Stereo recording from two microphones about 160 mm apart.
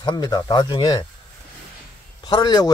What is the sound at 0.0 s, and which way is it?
Speech, 25° left (ahead or behind).